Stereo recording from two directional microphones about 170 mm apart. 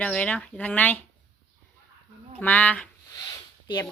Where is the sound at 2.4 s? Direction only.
10° left (ahead or behind).